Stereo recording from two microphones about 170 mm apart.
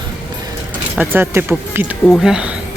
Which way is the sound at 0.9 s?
10° right (ahead or behind).